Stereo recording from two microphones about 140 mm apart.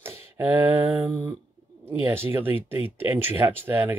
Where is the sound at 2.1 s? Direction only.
15° right (ahead or behind).